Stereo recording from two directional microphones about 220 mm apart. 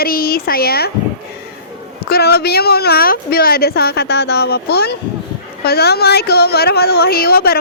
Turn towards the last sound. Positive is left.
turn(degrees=45)  # may be behind; listen again after turning